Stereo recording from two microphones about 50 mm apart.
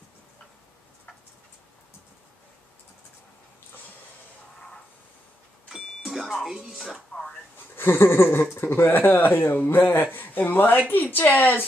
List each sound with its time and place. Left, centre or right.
5.7 s music: centre
6.7 s speech: centre
7.5 s speech: left